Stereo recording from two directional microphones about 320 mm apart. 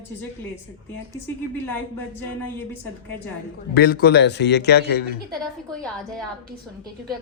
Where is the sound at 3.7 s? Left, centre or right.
Left.